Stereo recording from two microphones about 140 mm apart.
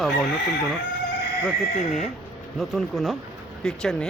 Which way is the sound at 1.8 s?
60° left (ahead or behind).